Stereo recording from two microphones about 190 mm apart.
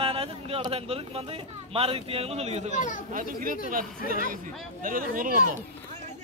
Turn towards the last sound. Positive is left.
turn(degrees=-45)  # may be behind; listen again after turning